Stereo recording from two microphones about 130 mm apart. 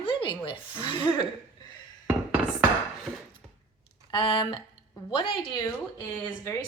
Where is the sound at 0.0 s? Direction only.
40° left (ahead or behind).